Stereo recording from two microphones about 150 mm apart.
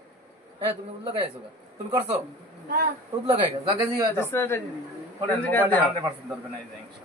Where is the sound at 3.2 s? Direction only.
35° right (ahead or behind).